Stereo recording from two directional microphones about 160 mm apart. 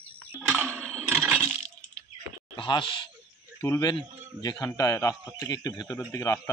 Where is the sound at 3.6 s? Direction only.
20° left (ahead or behind).